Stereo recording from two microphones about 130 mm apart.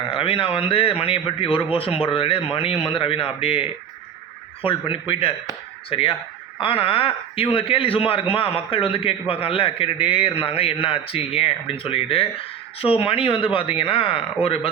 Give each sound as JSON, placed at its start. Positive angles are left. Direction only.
{"t": 0.1, "sound": "a man's voice", "side_deg": 45}